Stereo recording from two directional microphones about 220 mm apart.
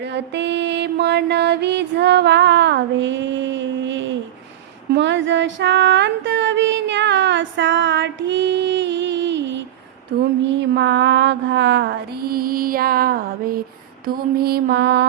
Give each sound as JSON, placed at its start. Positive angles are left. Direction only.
{"t": 0.1, "sound": "mantra", "side_deg": -50}
{"t": 4.9, "sound": "music", "side_deg": -55}
{"t": 10.1, "sound": "mantra", "side_deg": -55}